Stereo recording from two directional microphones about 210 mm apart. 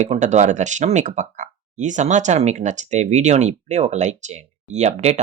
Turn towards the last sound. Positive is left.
turn(degrees=-30)  # may be behind; listen again after turning